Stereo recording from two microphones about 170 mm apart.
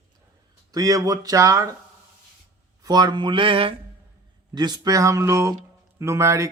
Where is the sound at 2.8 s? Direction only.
25° right (ahead or behind).